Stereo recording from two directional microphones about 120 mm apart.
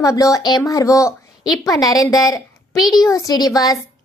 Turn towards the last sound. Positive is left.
turn(degrees=30)  # may be behind; listen again after turning